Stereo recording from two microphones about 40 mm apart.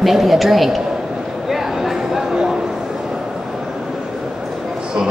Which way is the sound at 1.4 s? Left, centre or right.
Centre.